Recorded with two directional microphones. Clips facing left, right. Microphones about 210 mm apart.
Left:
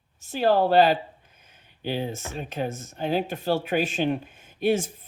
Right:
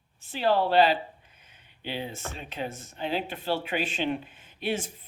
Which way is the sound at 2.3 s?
45° left (ahead or behind).